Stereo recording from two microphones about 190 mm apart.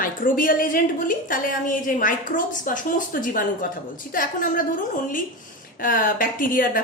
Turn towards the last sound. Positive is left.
turn(degrees=45)  # may be behind; listen again after turning